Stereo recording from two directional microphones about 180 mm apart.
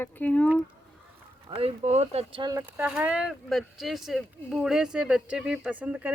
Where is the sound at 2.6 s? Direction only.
5° right (ahead or behind).